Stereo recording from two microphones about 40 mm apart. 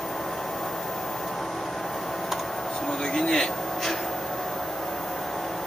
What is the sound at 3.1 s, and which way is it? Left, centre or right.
Speech, centre.